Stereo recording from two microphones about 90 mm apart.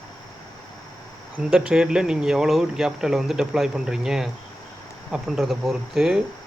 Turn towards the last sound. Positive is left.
turn(degrees=-5)  # may be behind; listen again after turning